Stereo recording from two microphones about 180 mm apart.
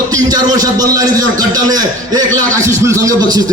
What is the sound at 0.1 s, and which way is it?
A man's voice, 20° right (ahead or behind).